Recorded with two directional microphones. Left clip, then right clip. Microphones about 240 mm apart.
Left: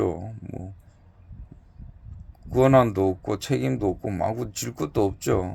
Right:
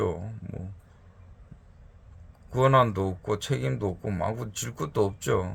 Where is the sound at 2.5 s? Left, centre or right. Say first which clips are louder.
Left 3 dB; centre.